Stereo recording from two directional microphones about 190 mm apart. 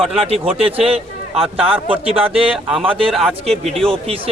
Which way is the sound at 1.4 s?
5° right (ahead or behind).